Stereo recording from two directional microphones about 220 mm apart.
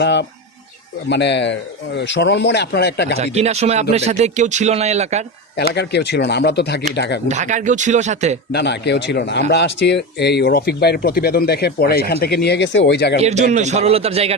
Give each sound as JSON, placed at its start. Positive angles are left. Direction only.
{"t": 0.0, "sound": "speech", "side_deg": 50}
{"t": 3.2, "sound": "a man's voice", "side_deg": -30}
{"t": 5.7, "sound": "speech", "side_deg": 50}
{"t": 7.3, "sound": "a man's voice", "side_deg": -35}
{"t": 8.5, "sound": "speech", "side_deg": 50}
{"t": 13.2, "sound": "a man's voice", "side_deg": -30}